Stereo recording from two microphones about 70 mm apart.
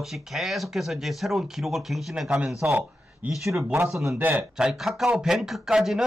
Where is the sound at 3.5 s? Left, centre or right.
Right.